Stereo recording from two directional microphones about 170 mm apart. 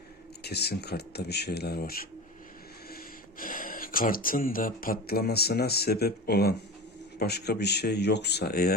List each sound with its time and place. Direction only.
0.4 s speech: 75° left (ahead or behind)